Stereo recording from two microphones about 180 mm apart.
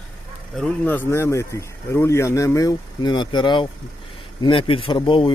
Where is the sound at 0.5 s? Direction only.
5° left (ahead or behind).